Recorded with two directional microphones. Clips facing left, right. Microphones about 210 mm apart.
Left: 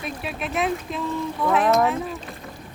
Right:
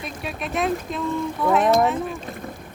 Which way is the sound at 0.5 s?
Centre (ahead or behind).